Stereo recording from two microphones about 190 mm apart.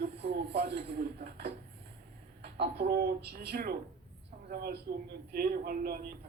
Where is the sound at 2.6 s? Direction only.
55° right (ahead or behind).